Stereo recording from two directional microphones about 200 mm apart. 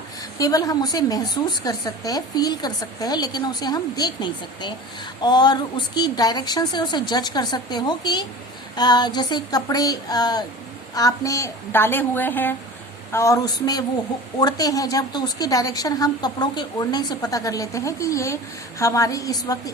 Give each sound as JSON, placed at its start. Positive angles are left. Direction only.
{"t": 0.3, "sound": "a woman's voice", "side_deg": 20}